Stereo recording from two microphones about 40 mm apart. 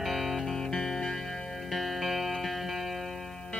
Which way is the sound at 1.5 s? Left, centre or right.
Centre.